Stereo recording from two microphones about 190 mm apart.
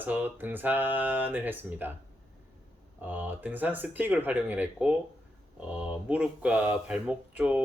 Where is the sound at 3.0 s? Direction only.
10° right (ahead or behind).